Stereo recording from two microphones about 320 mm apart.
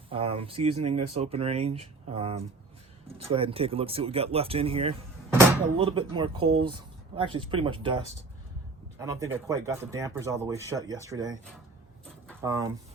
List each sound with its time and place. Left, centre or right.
0.1 s speech: centre
12.4 s speech: centre